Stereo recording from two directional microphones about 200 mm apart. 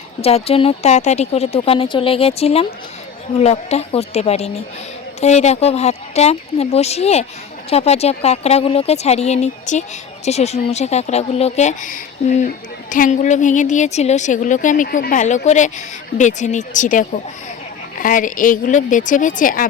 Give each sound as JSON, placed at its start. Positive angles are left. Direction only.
{"t": 0.2, "sound": "a woman's voice", "side_deg": 30}